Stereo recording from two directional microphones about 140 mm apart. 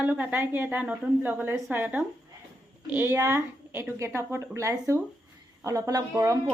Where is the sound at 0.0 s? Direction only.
10° right (ahead or behind).